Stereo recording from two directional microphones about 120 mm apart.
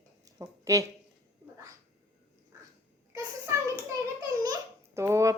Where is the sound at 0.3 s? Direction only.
25° right (ahead or behind).